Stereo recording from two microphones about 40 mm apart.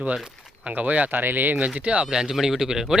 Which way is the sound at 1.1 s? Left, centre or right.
Right.